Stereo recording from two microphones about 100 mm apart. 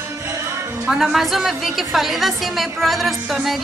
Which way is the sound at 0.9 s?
5° right (ahead or behind).